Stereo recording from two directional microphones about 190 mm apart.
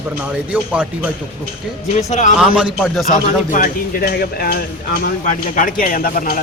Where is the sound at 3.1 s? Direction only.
45° left (ahead or behind).